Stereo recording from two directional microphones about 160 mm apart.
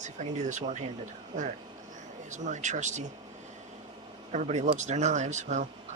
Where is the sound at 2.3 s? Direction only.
50° right (ahead or behind).